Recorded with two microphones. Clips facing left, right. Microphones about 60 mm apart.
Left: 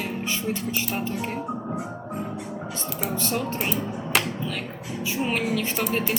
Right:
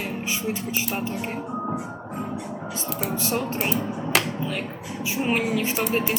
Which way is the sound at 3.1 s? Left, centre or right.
Centre.